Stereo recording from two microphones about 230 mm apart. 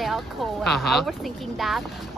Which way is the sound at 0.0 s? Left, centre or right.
Centre.